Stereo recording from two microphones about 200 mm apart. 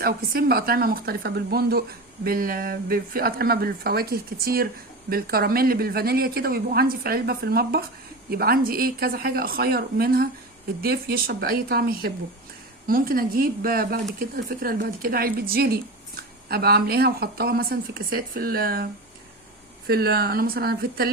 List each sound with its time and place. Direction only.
0.0 s speech: 50° right (ahead or behind)
19.9 s speech: 50° right (ahead or behind)